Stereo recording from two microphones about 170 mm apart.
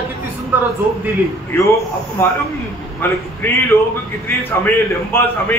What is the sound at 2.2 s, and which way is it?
Speech, 15° left (ahead or behind).